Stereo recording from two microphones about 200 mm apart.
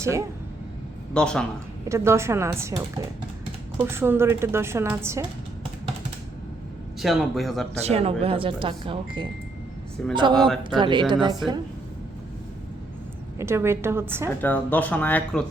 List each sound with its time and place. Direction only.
0.0 s a woman's voice: 15° right (ahead or behind)
1.1 s speech: 5° left (ahead or behind)
1.9 s a woman's voice: 15° right (ahead or behind)
3.8 s a woman's voice: 10° right (ahead or behind)
7.0 s speech: centre (ahead or behind)
7.8 s speech: 30° right (ahead or behind)
10.0 s speech: 5° left (ahead or behind)
10.6 s speech: 25° right (ahead or behind)
13.4 s a woman's voice: 15° right (ahead or behind)
14.4 s speech: 10° left (ahead or behind)